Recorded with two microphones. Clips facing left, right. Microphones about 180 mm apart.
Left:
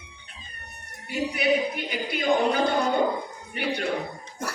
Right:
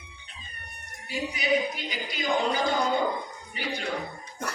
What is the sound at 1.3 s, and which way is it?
A woman's voice, 60° left (ahead or behind).